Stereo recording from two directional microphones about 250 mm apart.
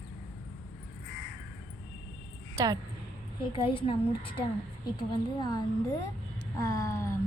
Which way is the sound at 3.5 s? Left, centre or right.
Left.